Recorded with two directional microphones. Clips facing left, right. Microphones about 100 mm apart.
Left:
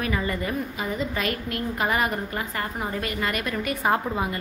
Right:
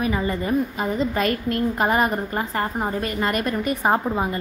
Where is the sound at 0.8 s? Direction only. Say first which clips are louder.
Right 5 dB; 40° right (ahead or behind).